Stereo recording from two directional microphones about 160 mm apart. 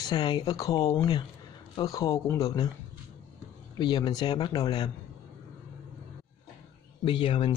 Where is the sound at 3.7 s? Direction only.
30° left (ahead or behind).